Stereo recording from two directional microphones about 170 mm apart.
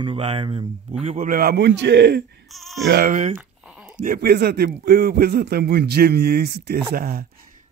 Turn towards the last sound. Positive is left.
turn(degrees=-60)  # may be behind; listen again after turning